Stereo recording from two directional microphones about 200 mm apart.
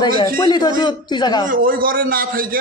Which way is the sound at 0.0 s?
20° left (ahead or behind).